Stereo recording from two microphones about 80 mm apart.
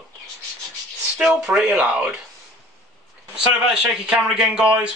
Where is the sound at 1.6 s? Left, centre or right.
Centre.